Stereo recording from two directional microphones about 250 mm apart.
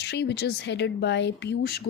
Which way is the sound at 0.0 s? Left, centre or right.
Left.